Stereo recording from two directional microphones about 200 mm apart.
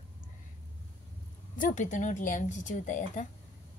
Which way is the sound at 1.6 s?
40° left (ahead or behind).